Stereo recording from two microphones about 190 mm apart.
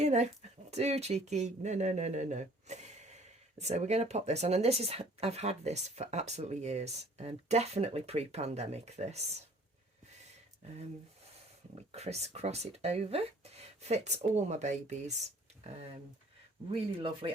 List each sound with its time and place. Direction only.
0.0 s speech: 35° right (ahead or behind)
11.7 s speech: 30° right (ahead or behind)
16.7 s speech: 30° right (ahead or behind)